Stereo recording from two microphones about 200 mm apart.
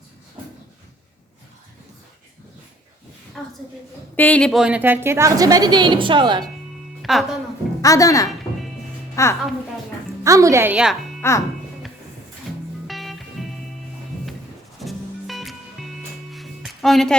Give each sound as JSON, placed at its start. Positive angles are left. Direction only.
{"t": 4.2, "sound": "a woman's voice", "side_deg": 5}
{"t": 7.0, "sound": "music", "side_deg": 0}
{"t": 7.8, "sound": "speech", "side_deg": 15}
{"t": 10.2, "sound": "a woman's voice", "side_deg": -15}
{"t": 11.2, "sound": "speech", "side_deg": 15}
{"t": 12.9, "sound": "music", "side_deg": 0}
{"t": 14.8, "sound": "music", "side_deg": 0}